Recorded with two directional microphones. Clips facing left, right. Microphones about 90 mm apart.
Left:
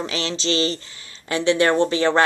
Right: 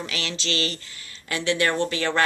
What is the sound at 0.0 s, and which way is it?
A woman's voice, 25° left (ahead or behind).